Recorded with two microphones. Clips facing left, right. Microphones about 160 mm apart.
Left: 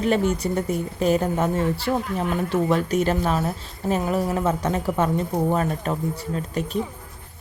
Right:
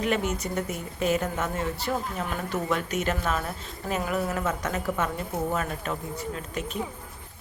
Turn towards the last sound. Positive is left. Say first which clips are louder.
# left 6 dB
turn(degrees=35)  # may be behind; listen again after turning